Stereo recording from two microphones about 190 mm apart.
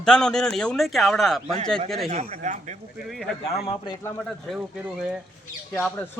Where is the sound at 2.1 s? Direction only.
35° right (ahead or behind).